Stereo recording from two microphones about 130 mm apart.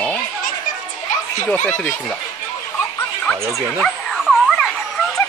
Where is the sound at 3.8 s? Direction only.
Centre (ahead or behind).